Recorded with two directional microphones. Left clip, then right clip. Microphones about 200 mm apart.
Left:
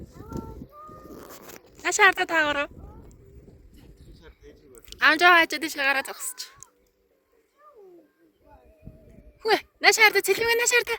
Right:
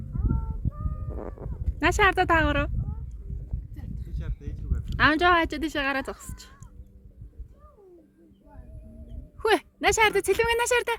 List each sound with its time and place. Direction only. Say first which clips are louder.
1.8 s speech: left 2 dB; 15° right (ahead or behind)
4.2 s a sound: right 2 dB; 5° left (ahead or behind)
4.9 s speech: left 3 dB; 10° right (ahead or behind)
9.4 s speech: left 2 dB; 20° right (ahead or behind)